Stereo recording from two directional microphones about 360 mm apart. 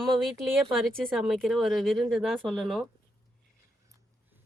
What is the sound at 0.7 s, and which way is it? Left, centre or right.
Speech, centre.